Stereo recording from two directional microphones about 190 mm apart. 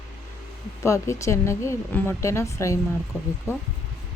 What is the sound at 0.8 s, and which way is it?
Speech, 15° left (ahead or behind).